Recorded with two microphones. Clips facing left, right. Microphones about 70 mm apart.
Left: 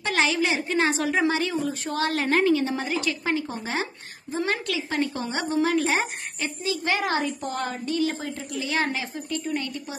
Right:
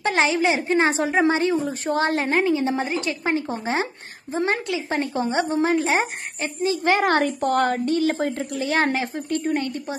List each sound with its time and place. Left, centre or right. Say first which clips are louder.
0.0 s a woman's voice: right 4 dB; right